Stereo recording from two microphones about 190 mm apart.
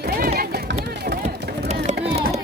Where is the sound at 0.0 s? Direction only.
55° right (ahead or behind).